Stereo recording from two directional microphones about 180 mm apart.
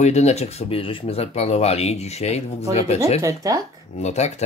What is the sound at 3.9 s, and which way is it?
Speech, 40° left (ahead or behind).